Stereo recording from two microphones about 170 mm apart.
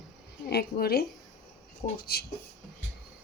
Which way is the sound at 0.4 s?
70° left (ahead or behind).